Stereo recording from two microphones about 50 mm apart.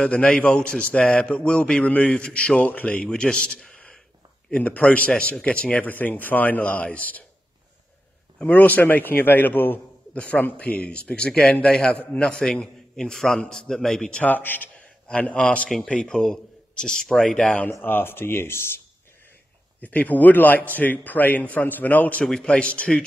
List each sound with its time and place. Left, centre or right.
0.1 s a man's voice: centre
3.0 s a man's voice: centre
4.5 s a man's voice: left
8.4 s a man's voice: left; by 14.2 s centre
14.2 s a man's voice: left
15.3 s a man's voice: left
17.8 s speech: left
19.8 s speech: left
22.2 s a man's voice: centre